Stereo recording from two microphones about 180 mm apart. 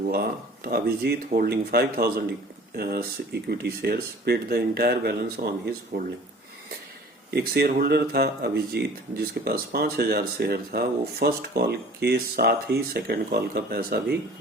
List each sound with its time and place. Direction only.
0.1 s speech: 55° right (ahead or behind)
5.4 s speech: 45° right (ahead or behind)
7.3 s speech: 60° right (ahead or behind)